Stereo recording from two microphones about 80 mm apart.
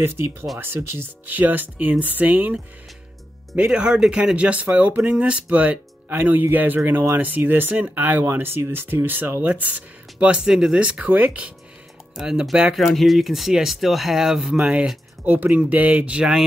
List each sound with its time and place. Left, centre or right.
0.0 s speech: right
0.9 s speech: right
12.7 s speech: centre